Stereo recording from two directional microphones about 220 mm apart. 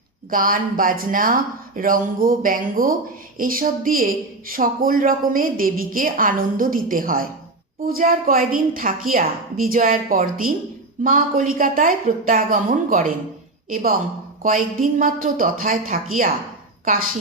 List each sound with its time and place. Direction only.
0.3 s speech: 40° right (ahead or behind)
14.4 s speech: 40° right (ahead or behind)